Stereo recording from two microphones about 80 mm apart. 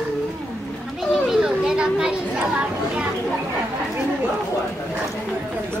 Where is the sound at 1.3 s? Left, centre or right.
Centre.